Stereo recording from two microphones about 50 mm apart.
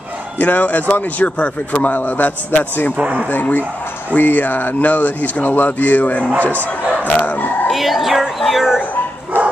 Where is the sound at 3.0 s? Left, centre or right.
Right.